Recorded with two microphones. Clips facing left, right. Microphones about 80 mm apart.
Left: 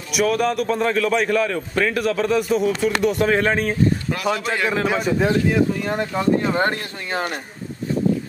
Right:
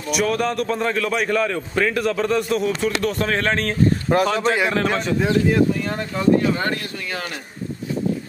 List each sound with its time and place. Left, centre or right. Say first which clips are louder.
0.1 s a man's voice: left 1 dB; centre
4.1 s speech: right 9 dB; right
4.6 s a man's voice: even; centre
5.9 s speech: right 1 dB; centre